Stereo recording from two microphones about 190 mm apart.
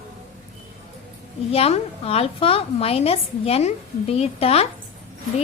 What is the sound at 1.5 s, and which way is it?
A woman's voice, 30° left (ahead or behind).